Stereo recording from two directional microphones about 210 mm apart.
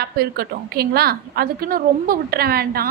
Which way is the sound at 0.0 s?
50° right (ahead or behind).